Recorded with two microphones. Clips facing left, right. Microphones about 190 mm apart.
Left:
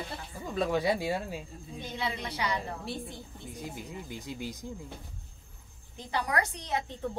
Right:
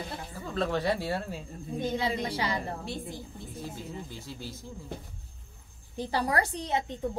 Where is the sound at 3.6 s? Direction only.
15° left (ahead or behind).